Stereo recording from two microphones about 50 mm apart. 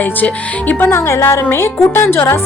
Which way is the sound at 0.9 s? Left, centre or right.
Left.